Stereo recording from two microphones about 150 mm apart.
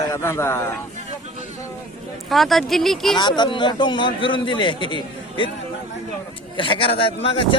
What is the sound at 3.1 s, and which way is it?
A man's voice, 30° left (ahead or behind).